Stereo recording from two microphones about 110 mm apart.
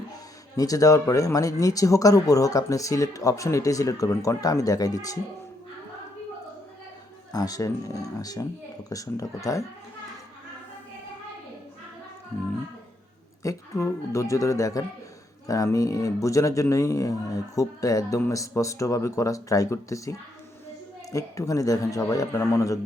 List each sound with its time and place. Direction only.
0.5 s speech: 30° left (ahead or behind)
7.3 s speech: 35° left (ahead or behind)
13.4 s speech: 30° left (ahead or behind)